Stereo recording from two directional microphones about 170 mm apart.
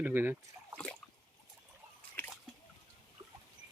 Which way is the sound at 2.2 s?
10° left (ahead or behind).